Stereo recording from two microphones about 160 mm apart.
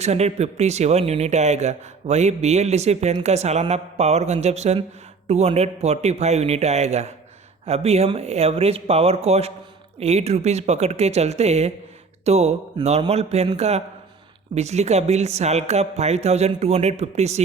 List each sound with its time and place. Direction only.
0.0 s speech: 45° right (ahead or behind)